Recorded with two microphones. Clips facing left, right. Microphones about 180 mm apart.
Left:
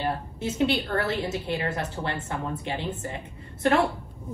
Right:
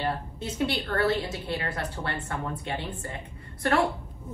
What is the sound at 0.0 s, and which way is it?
A woman's voice, 20° left (ahead or behind).